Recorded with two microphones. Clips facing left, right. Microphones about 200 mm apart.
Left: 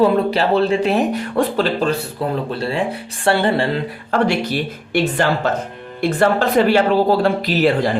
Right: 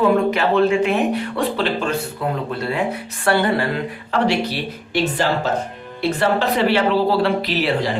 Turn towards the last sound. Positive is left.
turn(degrees=50)  # may be behind; listen again after turning